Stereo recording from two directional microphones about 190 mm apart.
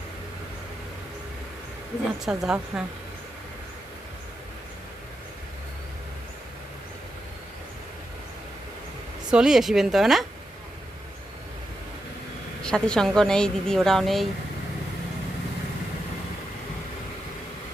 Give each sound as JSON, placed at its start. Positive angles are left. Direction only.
{"t": 2.2, "sound": "speech", "side_deg": -5}
{"t": 9.3, "sound": "speech", "side_deg": -5}
{"t": 12.6, "sound": "speech", "side_deg": 5}